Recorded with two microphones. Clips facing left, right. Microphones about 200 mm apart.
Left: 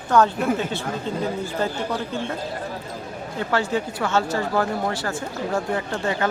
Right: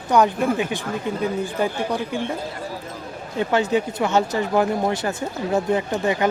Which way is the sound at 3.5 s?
20° right (ahead or behind).